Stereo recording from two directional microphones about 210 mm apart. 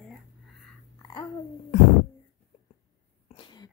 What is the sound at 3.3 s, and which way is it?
Cough, 20° left (ahead or behind).